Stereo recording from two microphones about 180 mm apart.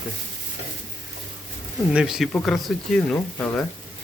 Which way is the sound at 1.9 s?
5° right (ahead or behind).